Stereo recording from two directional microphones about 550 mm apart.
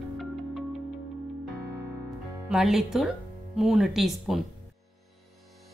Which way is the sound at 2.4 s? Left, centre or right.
Centre.